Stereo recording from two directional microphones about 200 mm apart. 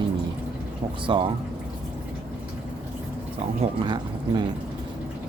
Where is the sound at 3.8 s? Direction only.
20° right (ahead or behind).